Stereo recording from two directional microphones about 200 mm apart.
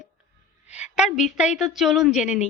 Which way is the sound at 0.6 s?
35° left (ahead or behind).